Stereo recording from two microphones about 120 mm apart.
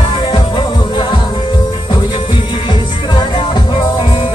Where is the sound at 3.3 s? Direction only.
45° left (ahead or behind).